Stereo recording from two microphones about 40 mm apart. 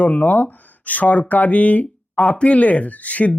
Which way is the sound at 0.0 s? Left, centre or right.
Left.